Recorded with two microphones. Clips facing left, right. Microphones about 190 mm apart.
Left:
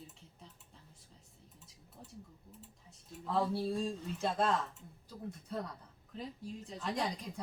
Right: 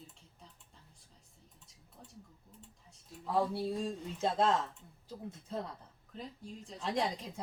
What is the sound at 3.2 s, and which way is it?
Speech, 15° right (ahead or behind).